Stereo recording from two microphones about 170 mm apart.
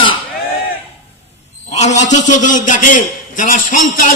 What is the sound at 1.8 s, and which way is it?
A man's voice, 45° left (ahead or behind).